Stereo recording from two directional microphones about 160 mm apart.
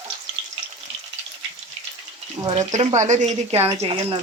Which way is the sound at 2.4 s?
45° right (ahead or behind).